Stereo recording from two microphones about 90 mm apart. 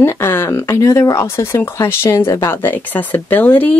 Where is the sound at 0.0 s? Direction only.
25° left (ahead or behind).